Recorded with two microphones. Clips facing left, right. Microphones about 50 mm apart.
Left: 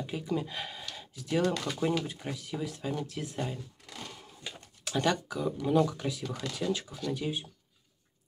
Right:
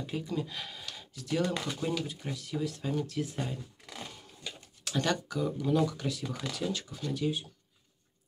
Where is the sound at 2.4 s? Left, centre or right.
Centre.